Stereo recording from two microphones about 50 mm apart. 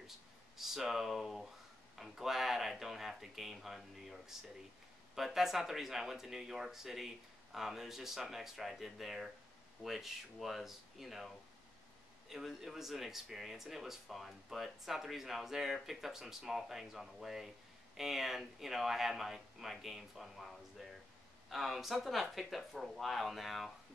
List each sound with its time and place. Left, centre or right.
0.6 s speech: centre
12.3 s speech: centre